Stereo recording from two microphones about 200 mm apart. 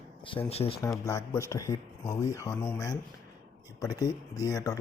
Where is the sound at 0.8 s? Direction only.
15° left (ahead or behind).